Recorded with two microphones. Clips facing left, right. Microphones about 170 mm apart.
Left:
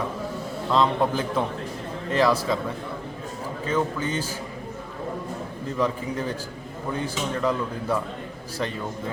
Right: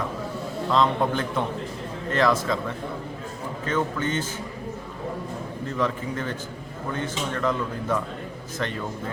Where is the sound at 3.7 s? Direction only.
10° left (ahead or behind).